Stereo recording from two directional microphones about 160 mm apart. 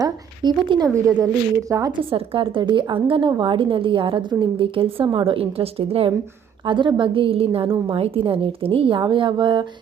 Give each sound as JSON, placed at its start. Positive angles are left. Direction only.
{"t": 0.0, "sound": "a sound", "side_deg": -25}
{"t": 1.0, "sound": "a woman's voice", "side_deg": -20}
{"t": 2.0, "sound": "a woman's voice", "side_deg": -35}